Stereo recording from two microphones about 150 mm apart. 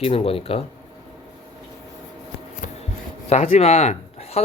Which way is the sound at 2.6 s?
55° left (ahead or behind).